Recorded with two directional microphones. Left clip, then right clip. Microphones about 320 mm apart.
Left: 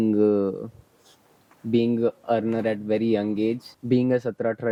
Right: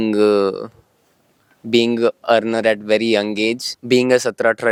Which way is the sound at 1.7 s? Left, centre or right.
Centre.